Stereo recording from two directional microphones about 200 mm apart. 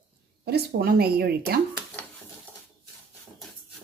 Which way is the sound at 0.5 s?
50° right (ahead or behind).